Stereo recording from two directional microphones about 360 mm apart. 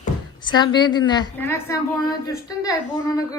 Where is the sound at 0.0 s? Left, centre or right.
Centre.